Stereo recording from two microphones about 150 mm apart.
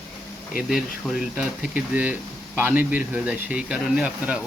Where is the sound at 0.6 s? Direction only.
5° right (ahead or behind).